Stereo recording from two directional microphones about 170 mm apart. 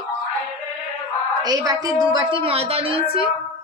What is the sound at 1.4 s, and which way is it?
A woman's voice, 20° right (ahead or behind).